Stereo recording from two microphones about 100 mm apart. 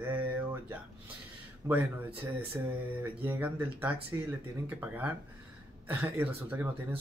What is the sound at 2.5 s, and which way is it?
Speech, 20° right (ahead or behind).